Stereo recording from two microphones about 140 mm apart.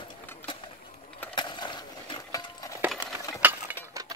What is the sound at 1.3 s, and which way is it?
Horse, 35° left (ahead or behind).